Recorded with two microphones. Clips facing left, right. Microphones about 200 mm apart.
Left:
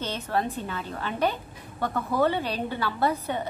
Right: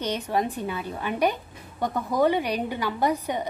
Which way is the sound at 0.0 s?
15° right (ahead or behind).